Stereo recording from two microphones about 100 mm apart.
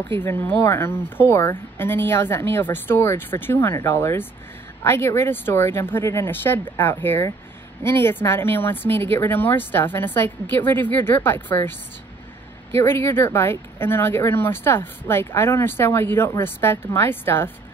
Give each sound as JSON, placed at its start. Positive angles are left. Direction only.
{"t": 0.2, "sound": "speech", "side_deg": 20}
{"t": 12.7, "sound": "speech", "side_deg": 25}